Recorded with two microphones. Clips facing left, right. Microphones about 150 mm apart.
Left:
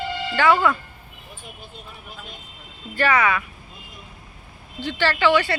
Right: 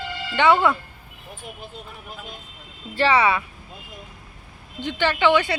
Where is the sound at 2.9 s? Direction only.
30° right (ahead or behind).